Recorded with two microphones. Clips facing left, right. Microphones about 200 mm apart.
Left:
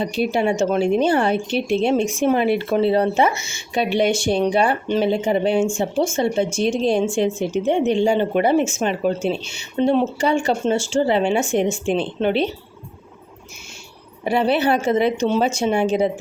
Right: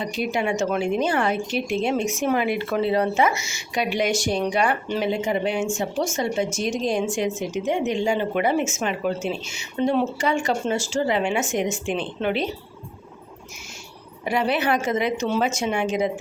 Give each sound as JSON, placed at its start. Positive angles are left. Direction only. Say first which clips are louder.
{"t": 0.0, "sound": "speech", "louder": "left 5 dB", "side_deg": 30}
{"t": 14.3, "sound": "speech", "louder": "left 4 dB", "side_deg": 30}